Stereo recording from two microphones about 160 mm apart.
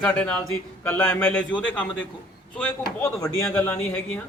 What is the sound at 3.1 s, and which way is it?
A man's voice, 20° left (ahead or behind).